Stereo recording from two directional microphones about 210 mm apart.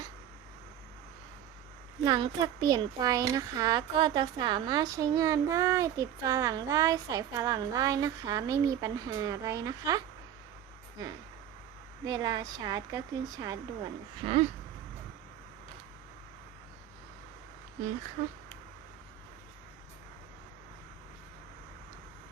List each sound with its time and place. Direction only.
2.0 s a child's voice: 20° right (ahead or behind)
12.0 s speech: 20° right (ahead or behind)
18.2 s speech: 40° right (ahead or behind)